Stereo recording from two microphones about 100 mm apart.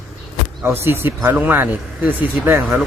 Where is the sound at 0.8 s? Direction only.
20° right (ahead or behind).